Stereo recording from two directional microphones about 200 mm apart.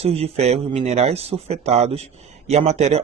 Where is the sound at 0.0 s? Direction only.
30° right (ahead or behind).